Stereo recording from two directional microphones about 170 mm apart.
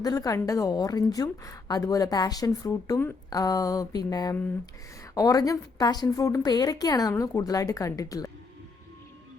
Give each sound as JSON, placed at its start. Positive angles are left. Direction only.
{"t": 0.0, "sound": "a woman's voice", "side_deg": 20}